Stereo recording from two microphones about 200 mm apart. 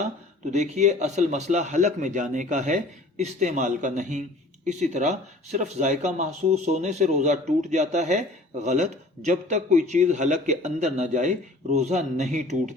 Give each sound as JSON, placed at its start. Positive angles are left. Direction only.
{"t": 0.5, "sound": "speech", "side_deg": -35}